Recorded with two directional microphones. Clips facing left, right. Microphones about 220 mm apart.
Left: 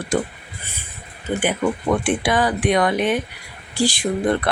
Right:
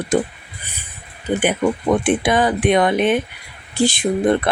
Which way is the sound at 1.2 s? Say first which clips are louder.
Right 3 dB; 20° right (ahead or behind).